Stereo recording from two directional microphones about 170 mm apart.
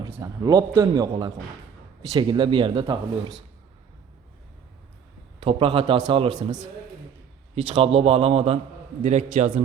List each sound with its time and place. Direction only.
0.1 s speech: 20° right (ahead or behind)
5.4 s speech: 30° right (ahead or behind)
7.5 s a man's voice: 35° right (ahead or behind)